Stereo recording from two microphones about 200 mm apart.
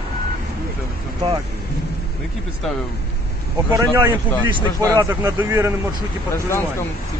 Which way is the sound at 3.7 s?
20° right (ahead or behind).